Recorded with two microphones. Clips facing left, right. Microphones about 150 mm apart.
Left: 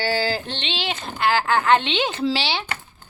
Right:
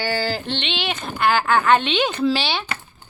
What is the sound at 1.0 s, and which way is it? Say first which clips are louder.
Speech: right 2 dB; 20° left (ahead or behind).